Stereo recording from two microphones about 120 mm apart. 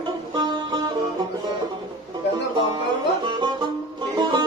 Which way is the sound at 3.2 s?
40° right (ahead or behind).